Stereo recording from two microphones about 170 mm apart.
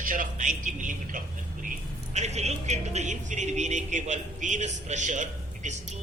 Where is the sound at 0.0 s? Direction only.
50° right (ahead or behind).